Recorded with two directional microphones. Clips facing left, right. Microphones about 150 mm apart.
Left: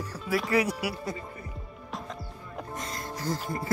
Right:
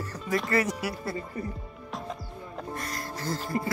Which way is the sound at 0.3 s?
10° left (ahead or behind).